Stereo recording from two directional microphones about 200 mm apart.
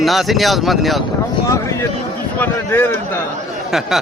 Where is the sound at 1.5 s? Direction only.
15° left (ahead or behind).